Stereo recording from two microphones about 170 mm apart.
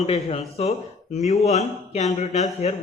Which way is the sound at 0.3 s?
35° left (ahead or behind).